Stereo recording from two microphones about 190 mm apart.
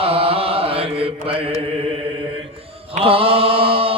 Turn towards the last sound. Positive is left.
turn(degrees=-30)  # may be behind; listen again after turning